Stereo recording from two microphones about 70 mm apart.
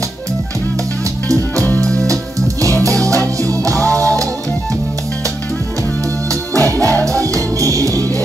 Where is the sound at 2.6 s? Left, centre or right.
Right.